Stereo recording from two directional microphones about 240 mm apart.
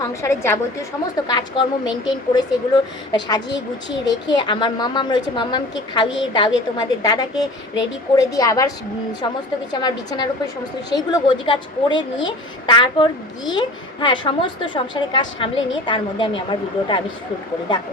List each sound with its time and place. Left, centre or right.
0.1 s a woman's voice: centre